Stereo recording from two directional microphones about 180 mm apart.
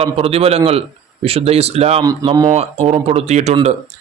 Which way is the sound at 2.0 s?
20° right (ahead or behind).